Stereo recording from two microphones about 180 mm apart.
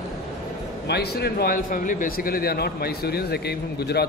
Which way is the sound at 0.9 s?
65° left (ahead or behind).